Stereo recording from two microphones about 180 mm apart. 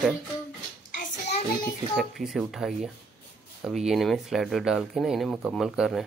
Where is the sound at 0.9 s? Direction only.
40° left (ahead or behind).